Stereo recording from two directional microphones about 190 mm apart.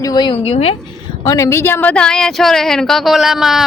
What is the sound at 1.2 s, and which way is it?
Speech, 15° left (ahead or behind).